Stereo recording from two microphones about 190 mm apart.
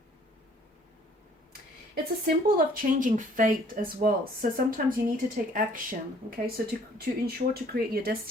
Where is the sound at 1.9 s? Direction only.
55° right (ahead or behind).